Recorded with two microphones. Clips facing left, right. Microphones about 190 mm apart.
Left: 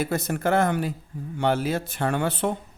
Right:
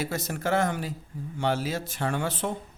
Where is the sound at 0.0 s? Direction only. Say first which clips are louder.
Left 5 dB; 55° left (ahead or behind).